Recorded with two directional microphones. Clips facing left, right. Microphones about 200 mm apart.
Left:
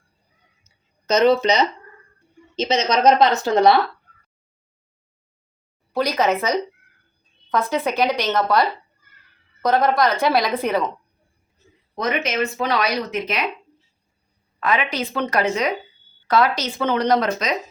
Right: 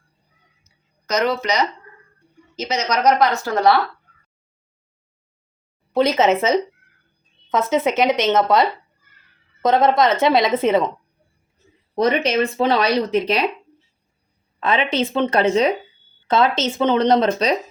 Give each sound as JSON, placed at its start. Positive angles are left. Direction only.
{"t": 1.0, "sound": "speech", "side_deg": 25}
{"t": 5.9, "sound": "a woman's voice", "side_deg": -25}
{"t": 11.9, "sound": "speech", "side_deg": -30}
{"t": 14.6, "sound": "a woman's voice", "side_deg": -25}